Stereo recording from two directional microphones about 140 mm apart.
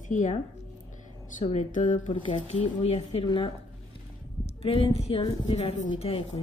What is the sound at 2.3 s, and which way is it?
A woman's voice, 45° left (ahead or behind).